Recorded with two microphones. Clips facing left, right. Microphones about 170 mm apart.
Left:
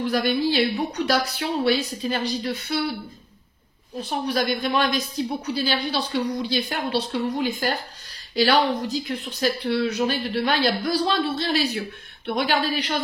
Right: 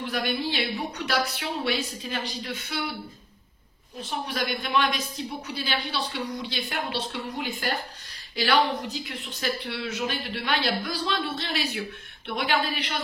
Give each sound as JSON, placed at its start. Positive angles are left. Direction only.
{"t": 0.0, "sound": "speech", "side_deg": 40}
{"t": 4.3, "sound": "speech", "side_deg": 35}